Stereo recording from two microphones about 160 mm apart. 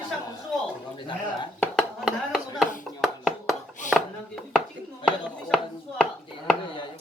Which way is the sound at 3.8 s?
50° left (ahead or behind).